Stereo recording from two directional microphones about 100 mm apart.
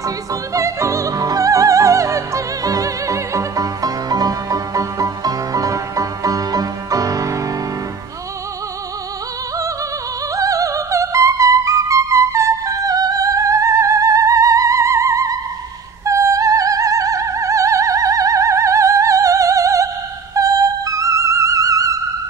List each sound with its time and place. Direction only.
0.0 s opera: 35° right (ahead or behind)
10.3 s music: 35° right (ahead or behind)
16.1 s opera: 30° right (ahead or behind)
20.3 s music: 35° right (ahead or behind)